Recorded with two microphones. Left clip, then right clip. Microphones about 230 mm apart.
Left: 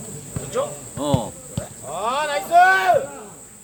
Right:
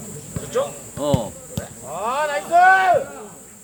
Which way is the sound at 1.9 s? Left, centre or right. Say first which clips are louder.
Even; left.